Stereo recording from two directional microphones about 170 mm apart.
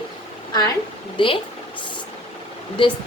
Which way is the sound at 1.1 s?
30° left (ahead or behind).